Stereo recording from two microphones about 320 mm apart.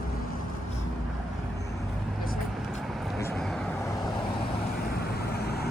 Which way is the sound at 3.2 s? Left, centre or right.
Centre.